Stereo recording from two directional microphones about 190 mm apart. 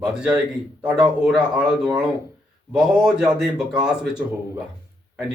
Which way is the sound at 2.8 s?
5° right (ahead or behind).